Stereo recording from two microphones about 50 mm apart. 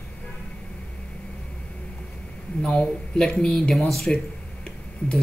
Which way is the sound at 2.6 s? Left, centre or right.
Left.